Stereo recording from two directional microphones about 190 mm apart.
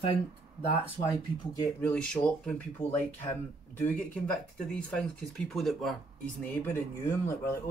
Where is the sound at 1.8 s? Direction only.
10° left (ahead or behind).